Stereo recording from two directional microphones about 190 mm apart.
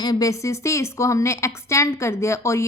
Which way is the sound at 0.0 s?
20° left (ahead or behind).